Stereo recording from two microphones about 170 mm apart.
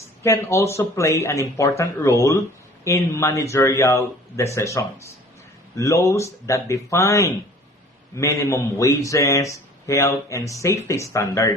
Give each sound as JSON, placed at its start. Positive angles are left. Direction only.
{"t": 0.2, "sound": "speech", "side_deg": 15}